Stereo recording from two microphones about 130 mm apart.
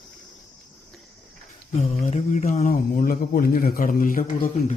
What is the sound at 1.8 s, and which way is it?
Speech, 60° left (ahead or behind).